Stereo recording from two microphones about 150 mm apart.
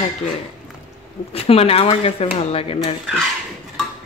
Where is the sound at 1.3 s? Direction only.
40° left (ahead or behind).